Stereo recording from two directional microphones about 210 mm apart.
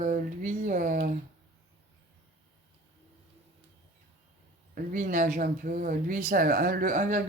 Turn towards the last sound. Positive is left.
turn(degrees=-40)  # may be behind; listen again after turning